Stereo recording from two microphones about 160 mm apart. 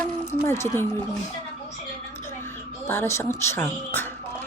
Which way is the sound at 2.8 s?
15° left (ahead or behind).